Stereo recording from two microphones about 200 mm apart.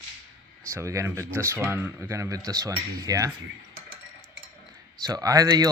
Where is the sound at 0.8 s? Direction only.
15° right (ahead or behind).